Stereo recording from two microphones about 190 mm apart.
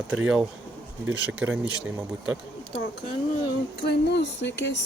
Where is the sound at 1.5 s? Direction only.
5° right (ahead or behind).